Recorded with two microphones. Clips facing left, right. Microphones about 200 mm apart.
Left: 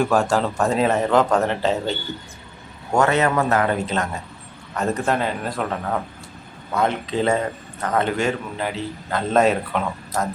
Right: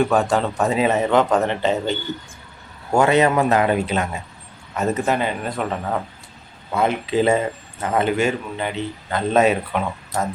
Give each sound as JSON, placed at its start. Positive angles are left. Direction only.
{"t": 0.0, "sound": "a man's voice", "side_deg": 0}
{"t": 2.9, "sound": "a man's voice", "side_deg": -15}